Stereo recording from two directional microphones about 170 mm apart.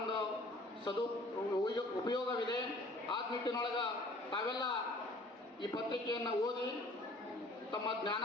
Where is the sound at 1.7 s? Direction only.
25° left (ahead or behind).